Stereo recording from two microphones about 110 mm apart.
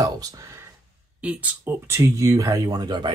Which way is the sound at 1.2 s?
15° right (ahead or behind).